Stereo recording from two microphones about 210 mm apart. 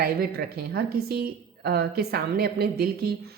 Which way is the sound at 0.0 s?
45° right (ahead or behind).